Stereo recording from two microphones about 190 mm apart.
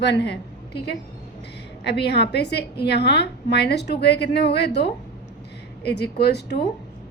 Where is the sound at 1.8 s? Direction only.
60° left (ahead or behind).